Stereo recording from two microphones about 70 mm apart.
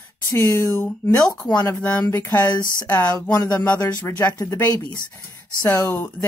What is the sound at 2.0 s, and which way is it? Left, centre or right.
Speech, left.